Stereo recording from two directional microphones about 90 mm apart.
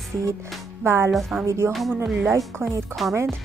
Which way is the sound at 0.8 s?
30° right (ahead or behind).